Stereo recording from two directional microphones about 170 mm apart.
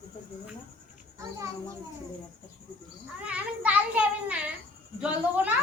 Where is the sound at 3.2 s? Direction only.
5° right (ahead or behind).